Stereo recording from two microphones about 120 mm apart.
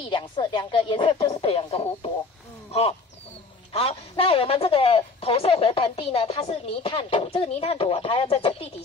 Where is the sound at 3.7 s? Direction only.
55° left (ahead or behind).